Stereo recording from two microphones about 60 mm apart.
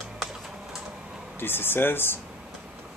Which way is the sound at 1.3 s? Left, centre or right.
Left.